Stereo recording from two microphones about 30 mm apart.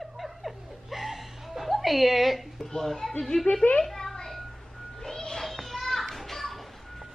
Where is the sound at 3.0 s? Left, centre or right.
Centre.